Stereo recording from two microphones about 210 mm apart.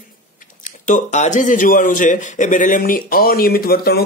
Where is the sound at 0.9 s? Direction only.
35° left (ahead or behind).